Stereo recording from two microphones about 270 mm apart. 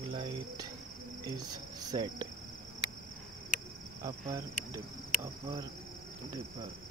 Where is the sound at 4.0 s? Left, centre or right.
Centre.